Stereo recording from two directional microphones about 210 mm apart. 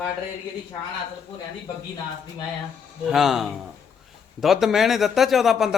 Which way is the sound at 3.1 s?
Centre (ahead or behind).